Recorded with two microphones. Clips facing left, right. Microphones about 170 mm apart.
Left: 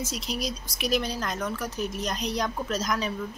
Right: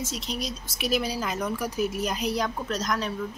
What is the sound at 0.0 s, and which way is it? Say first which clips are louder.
Speech: left 1 dB; centre (ahead or behind).